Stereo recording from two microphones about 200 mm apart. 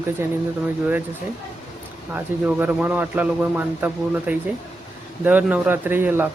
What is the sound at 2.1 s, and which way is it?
Speech, 10° right (ahead or behind).